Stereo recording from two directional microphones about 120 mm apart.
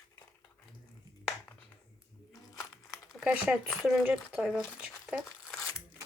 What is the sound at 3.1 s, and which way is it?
Speech, 10° right (ahead or behind).